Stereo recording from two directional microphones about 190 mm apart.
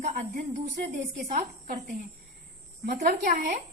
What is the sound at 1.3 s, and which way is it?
A woman's voice, 45° right (ahead or behind).